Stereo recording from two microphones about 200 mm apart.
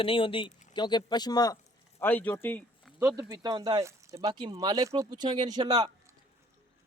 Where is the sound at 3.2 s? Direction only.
15° right (ahead or behind).